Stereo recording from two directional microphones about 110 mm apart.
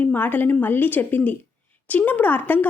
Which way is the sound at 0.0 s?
15° left (ahead or behind).